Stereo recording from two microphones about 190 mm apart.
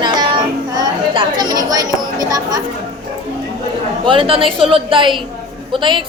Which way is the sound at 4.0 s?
25° right (ahead or behind).